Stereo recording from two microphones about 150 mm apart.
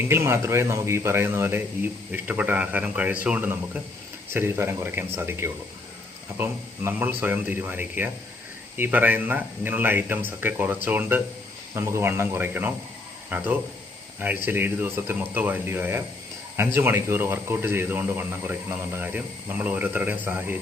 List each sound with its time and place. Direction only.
0.1 s speech: 20° right (ahead or behind)